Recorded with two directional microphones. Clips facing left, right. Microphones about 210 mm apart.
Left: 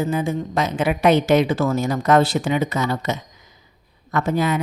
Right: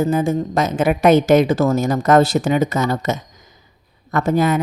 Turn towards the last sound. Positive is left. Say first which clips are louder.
# right 4 dB
turn(degrees=-45)  # may be behind; listen again after turning